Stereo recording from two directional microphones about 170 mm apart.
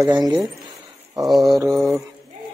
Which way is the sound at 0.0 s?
20° right (ahead or behind).